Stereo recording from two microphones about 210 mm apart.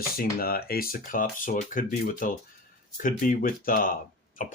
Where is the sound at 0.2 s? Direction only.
45° left (ahead or behind).